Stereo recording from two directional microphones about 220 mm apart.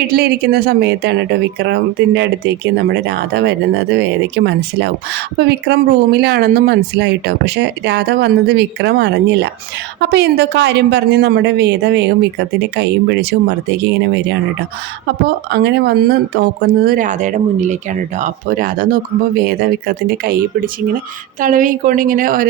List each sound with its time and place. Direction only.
0.1 s speech: 45° right (ahead or behind)
15.4 s speech: 50° right (ahead or behind)